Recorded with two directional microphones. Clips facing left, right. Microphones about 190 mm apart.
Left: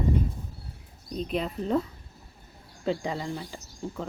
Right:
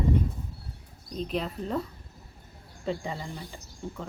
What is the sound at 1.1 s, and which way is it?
Speech, centre (ahead or behind).